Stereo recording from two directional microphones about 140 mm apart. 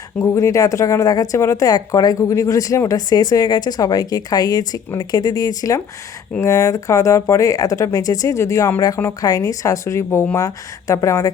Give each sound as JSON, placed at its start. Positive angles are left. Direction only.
{"t": 0.2, "sound": "speech", "side_deg": 20}